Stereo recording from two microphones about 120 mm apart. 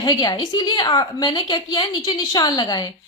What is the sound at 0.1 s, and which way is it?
A woman's voice, 35° left (ahead or behind).